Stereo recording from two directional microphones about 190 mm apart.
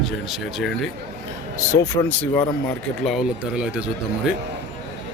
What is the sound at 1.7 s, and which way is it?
Speech, 15° left (ahead or behind).